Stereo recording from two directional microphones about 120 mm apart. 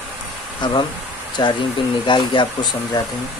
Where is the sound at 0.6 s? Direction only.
40° left (ahead or behind).